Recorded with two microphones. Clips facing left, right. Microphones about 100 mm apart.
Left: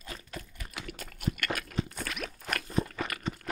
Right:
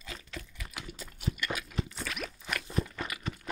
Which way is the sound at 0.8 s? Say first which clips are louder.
Left 3 dB; 55° left (ahead or behind).